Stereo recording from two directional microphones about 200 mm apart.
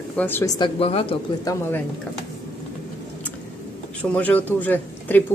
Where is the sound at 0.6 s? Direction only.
30° left (ahead or behind).